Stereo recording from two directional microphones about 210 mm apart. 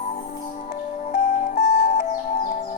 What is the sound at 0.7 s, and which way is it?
Music, 35° left (ahead or behind).